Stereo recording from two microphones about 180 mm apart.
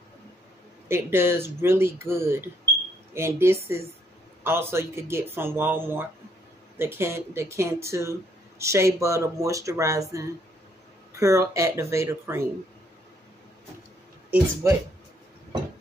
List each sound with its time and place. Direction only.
0.8 s speech: 15° right (ahead or behind)
14.3 s speech: 15° right (ahead or behind)